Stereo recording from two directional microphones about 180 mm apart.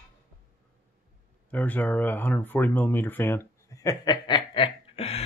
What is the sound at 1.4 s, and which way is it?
Speech, 10° left (ahead or behind).